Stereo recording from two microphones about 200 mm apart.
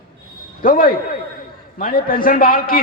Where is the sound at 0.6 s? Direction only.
45° left (ahead or behind).